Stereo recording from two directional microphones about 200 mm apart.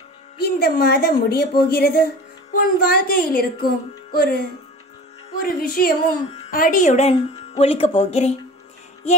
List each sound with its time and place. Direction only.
0.4 s speech: 50° left (ahead or behind)
6.2 s a sound: 30° left (ahead or behind)
6.5 s speech: 40° left (ahead or behind)